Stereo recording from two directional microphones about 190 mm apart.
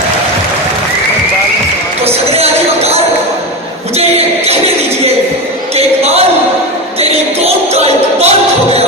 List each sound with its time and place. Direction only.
2.3 s music: 35° right (ahead or behind)
4.4 s music: 35° right (ahead or behind)
5.7 s a sound: 35° right (ahead or behind)